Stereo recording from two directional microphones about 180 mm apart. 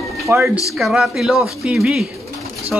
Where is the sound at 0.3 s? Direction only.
15° right (ahead or behind).